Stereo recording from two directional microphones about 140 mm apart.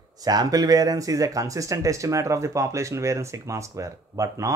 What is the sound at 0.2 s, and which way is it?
Speech, 25° right (ahead or behind).